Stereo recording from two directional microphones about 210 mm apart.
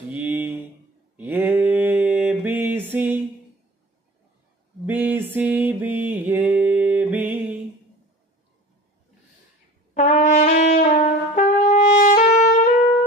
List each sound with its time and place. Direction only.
0.1 s mantra: 5° right (ahead or behind)
4.9 s music: 10° right (ahead or behind)
6.0 s a sound: 10° right (ahead or behind)
9.9 s brass instrument: 35° left (ahead or behind)